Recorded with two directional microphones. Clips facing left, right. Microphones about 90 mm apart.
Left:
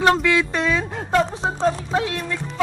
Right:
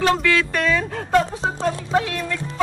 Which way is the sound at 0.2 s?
20° left (ahead or behind).